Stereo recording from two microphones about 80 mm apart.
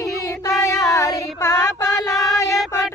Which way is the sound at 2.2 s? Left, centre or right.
Left.